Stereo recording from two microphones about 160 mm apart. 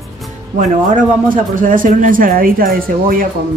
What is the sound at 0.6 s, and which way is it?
Speech, 55° right (ahead or behind).